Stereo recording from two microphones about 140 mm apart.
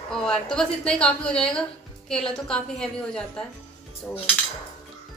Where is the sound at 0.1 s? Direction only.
5° left (ahead or behind).